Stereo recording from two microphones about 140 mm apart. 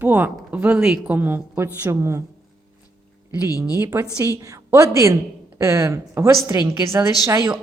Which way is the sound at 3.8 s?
20° right (ahead or behind).